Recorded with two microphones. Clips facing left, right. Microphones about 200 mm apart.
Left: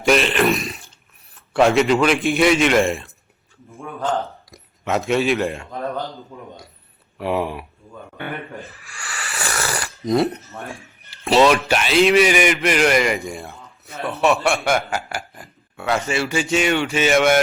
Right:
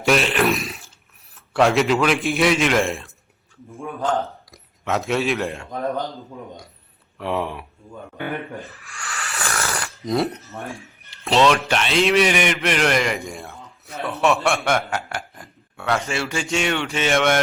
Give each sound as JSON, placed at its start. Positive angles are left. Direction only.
{"t": 0.0, "sound": "a man's voice", "side_deg": 0}
{"t": 4.5, "sound": "speech", "side_deg": 0}
{"t": 7.2, "sound": "a man's voice", "side_deg": 5}
{"t": 7.9, "sound": "speech", "side_deg": -15}
{"t": 8.8, "sound": "snoring", "side_deg": 0}
{"t": 11.1, "sound": "a man's voice", "side_deg": 5}